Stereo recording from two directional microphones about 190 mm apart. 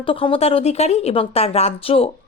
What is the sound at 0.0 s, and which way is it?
Speech, 30° left (ahead or behind).